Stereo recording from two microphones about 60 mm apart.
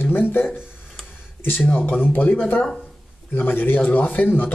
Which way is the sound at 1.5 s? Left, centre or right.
Left.